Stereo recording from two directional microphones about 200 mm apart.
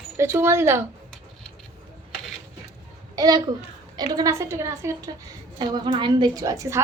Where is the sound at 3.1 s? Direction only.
20° right (ahead or behind).